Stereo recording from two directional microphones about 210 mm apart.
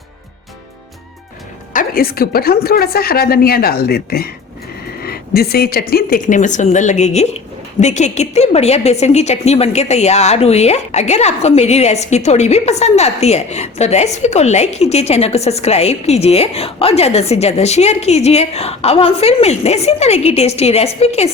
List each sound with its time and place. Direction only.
1.7 s a woman's voice: 40° left (ahead or behind)